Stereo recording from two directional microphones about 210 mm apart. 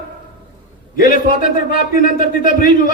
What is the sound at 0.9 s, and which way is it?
A man's voice, 40° left (ahead or behind).